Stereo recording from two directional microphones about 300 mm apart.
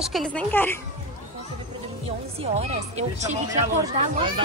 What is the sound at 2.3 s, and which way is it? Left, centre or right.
Speech, right.